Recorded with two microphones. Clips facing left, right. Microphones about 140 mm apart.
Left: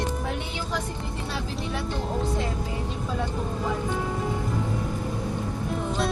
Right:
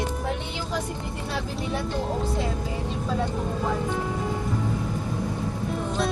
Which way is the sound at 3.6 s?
Centre (ahead or behind).